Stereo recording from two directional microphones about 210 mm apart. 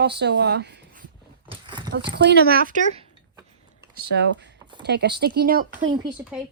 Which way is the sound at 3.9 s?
55° right (ahead or behind).